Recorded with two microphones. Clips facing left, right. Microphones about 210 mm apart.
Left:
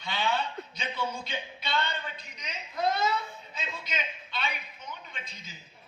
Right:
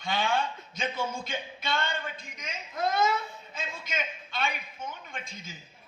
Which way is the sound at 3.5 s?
50° right (ahead or behind).